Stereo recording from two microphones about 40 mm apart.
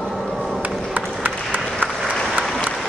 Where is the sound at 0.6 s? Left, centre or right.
Right.